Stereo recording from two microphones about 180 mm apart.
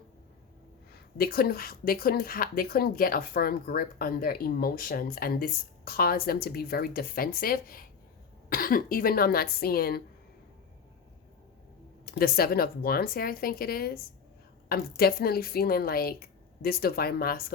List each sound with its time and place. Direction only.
1.2 s speech: 55° left (ahead or behind)
12.0 s speech: 55° left (ahead or behind)